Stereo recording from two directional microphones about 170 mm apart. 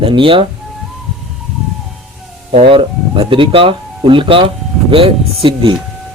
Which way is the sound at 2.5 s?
30° right (ahead or behind).